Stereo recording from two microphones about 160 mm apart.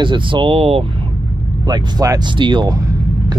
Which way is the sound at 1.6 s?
25° right (ahead or behind).